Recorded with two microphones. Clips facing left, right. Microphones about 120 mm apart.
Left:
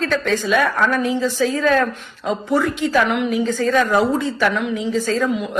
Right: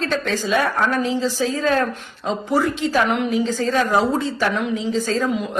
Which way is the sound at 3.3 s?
25° right (ahead or behind).